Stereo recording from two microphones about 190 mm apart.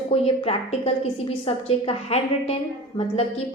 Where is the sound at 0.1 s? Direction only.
30° left (ahead or behind).